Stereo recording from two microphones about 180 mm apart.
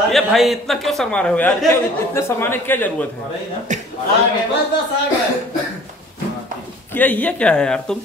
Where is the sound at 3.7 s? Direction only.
40° right (ahead or behind).